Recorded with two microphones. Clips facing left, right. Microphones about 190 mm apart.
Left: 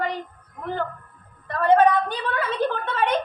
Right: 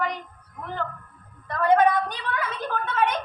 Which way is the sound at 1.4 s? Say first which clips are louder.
Left 2 dB; 30° left (ahead or behind).